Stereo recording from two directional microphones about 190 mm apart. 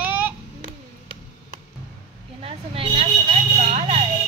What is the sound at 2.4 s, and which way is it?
Speech, 30° right (ahead or behind).